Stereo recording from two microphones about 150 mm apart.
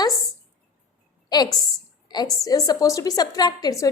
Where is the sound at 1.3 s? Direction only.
25° left (ahead or behind).